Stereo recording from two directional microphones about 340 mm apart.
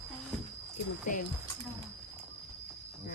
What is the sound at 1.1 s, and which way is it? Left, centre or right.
Speech, left.